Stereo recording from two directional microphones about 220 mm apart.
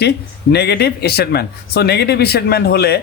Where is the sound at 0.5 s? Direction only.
50° left (ahead or behind).